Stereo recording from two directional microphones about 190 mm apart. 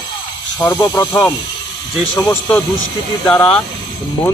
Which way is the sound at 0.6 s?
15° left (ahead or behind).